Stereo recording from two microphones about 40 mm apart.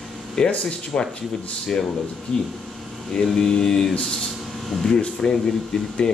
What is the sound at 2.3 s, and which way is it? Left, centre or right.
Speech, centre.